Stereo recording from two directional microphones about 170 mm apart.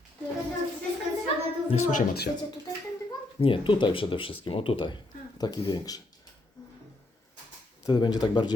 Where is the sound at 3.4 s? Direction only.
30° left (ahead or behind).